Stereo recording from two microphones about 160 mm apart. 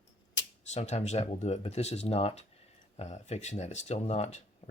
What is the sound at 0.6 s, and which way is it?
Speech, 45° left (ahead or behind).